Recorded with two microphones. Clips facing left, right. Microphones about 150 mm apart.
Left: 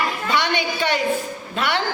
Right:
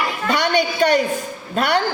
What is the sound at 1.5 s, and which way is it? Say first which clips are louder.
Speech: right 5 dB; 45° right (ahead or behind).